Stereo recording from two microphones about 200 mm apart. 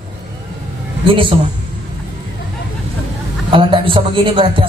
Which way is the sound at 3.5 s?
25° right (ahead or behind).